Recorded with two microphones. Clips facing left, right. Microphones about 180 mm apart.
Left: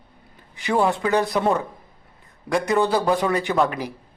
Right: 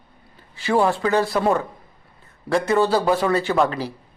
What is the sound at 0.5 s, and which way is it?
A man's voice, 15° left (ahead or behind).